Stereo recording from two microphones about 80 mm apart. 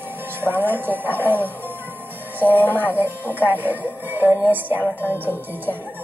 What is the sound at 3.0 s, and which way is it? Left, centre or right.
Speech, right.